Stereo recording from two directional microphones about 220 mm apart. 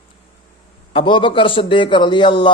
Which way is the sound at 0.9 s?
20° left (ahead or behind).